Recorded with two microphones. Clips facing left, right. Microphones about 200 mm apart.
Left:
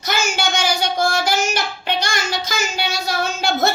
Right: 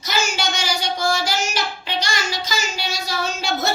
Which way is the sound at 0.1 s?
55° left (ahead or behind).